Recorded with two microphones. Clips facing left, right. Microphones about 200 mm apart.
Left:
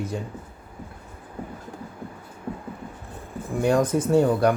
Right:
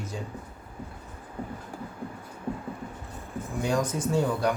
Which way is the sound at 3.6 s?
60° left (ahead or behind).